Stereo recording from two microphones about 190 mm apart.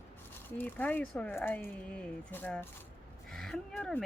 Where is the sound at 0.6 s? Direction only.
10° left (ahead or behind).